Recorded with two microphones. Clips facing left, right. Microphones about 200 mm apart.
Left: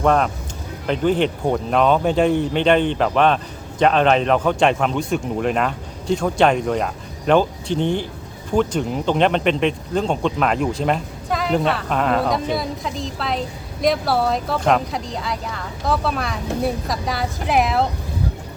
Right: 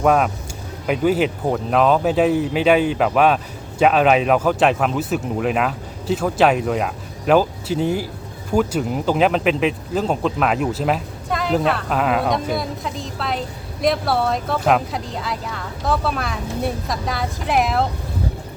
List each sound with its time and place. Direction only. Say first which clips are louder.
0.0 s speech: right 1 dB; 5° right (ahead or behind)